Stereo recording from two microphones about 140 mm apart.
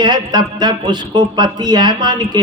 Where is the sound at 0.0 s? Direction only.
30° right (ahead or behind).